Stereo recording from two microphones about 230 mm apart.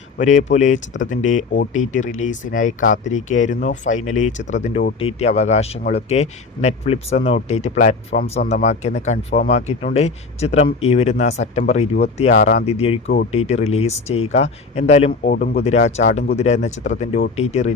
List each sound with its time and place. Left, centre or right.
0.2 s speech: left
13.1 s speech: left
15.6 s speech: left